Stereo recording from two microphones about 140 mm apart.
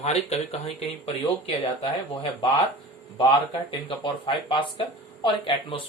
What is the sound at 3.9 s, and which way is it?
Speech, 35° left (ahead or behind).